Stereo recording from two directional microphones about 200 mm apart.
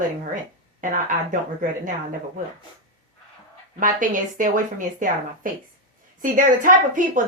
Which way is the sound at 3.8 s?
40° right (ahead or behind).